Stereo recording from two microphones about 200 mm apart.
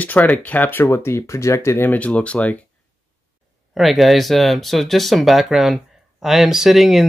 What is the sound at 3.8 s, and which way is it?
Speech, centre (ahead or behind).